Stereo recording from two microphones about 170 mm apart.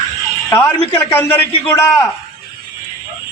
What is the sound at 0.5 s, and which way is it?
Speech, 10° left (ahead or behind).